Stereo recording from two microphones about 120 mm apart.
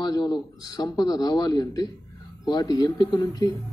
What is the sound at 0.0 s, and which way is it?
Speech, 35° left (ahead or behind).